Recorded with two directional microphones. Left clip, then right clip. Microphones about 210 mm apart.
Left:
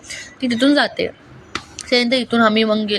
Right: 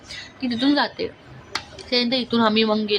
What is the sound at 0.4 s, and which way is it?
Speech, 10° left (ahead or behind).